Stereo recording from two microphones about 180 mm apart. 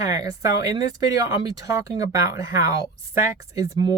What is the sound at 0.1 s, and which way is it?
Speech, 20° right (ahead or behind).